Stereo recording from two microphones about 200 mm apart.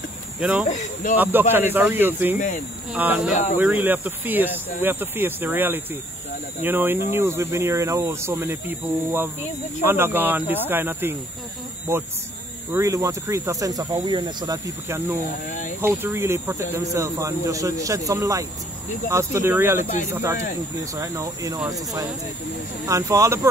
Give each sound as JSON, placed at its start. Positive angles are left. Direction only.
{"t": 0.4, "sound": "speech", "side_deg": -5}
{"t": 12.7, "sound": "speech", "side_deg": -15}